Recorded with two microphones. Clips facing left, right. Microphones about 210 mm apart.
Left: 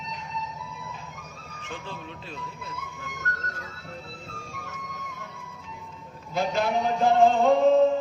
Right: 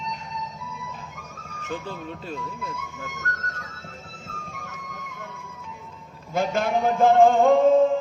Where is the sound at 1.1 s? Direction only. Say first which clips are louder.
Right 2 dB; 45° right (ahead or behind).